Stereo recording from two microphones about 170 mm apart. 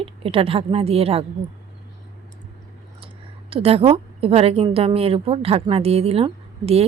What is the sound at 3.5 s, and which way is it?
Speech, 35° right (ahead or behind).